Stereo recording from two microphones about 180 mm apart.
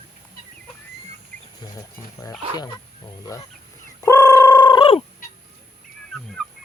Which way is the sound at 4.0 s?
15° left (ahead or behind).